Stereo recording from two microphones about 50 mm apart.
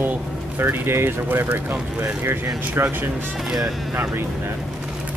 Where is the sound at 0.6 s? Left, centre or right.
Right.